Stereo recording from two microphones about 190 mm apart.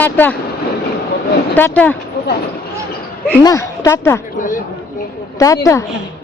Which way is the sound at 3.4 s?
15° left (ahead or behind).